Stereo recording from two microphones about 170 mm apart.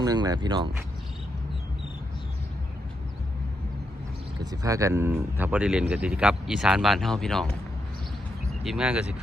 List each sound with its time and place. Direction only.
0.0 s speech: 25° right (ahead or behind)
4.5 s speech: 20° right (ahead or behind); by 7.5 s centre (ahead or behind)
8.6 s speech: 5° right (ahead or behind)